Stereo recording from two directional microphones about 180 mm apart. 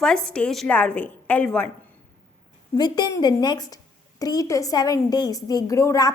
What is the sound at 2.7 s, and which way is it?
A woman's voice, 25° left (ahead or behind).